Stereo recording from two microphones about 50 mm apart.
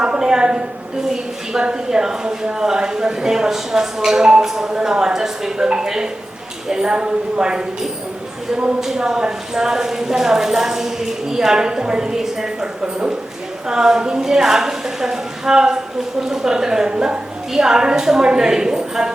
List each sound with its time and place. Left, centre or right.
0.0 s a woman's voice: centre
13.7 s a woman's voice: centre